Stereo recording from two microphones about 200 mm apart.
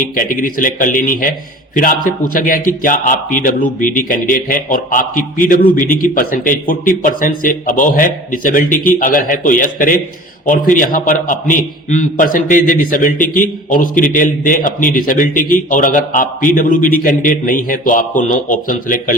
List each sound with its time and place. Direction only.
0.0 s a man's voice: 45° left (ahead or behind)